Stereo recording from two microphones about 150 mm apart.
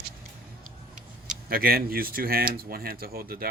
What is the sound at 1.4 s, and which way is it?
Speech, 80° right.